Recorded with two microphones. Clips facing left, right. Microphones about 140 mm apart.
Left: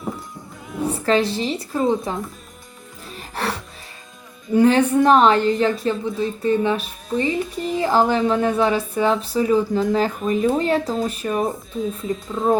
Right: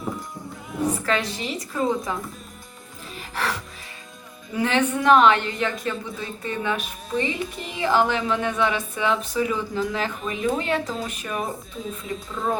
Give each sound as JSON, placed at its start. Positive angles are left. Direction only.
{"t": 0.9, "sound": "a woman's voice", "side_deg": 30}
{"t": 3.2, "sound": "music", "side_deg": 35}
{"t": 4.5, "sound": "a woman's voice", "side_deg": 35}